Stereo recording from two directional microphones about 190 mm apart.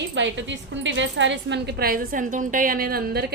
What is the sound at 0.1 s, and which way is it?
A woman's voice, 75° right (ahead or behind).